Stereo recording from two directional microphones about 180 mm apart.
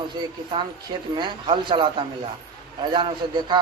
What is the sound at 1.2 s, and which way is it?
A man's voice, 30° right (ahead or behind).